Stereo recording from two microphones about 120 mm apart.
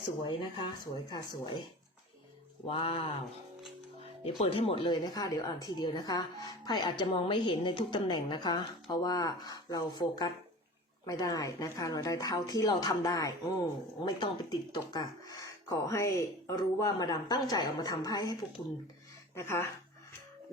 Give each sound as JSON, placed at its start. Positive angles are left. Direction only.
{"t": 0.2, "sound": "speech", "side_deg": 45}
{"t": 2.6, "sound": "speech", "side_deg": 50}
{"t": 4.2, "sound": "speech", "side_deg": 50}
{"t": 7.1, "sound": "speech", "side_deg": 45}
{"t": 19.5, "sound": "speech", "side_deg": 20}